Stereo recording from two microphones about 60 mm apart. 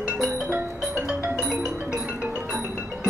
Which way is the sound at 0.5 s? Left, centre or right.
Right.